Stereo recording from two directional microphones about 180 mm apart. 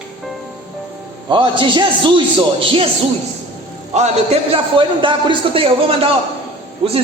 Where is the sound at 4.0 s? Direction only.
30° right (ahead or behind).